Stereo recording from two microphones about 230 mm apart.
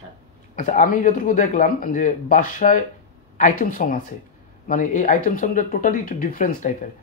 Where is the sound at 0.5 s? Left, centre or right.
Left.